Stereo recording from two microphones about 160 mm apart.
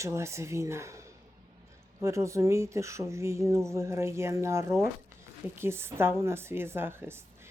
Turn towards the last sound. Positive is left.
turn(degrees=-15)  # may be behind; listen again after turning